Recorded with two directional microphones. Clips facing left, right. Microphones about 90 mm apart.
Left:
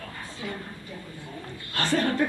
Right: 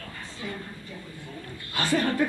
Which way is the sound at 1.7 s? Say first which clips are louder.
Even; 10° right (ahead or behind).